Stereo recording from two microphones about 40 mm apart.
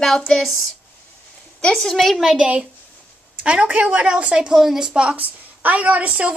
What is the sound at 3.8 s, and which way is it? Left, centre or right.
Speech, right.